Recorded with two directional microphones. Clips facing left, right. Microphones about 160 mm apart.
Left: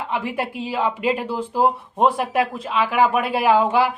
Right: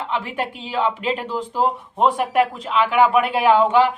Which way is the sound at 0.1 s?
10° left (ahead or behind).